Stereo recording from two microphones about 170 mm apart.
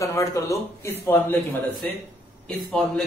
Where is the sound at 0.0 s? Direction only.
20° left (ahead or behind).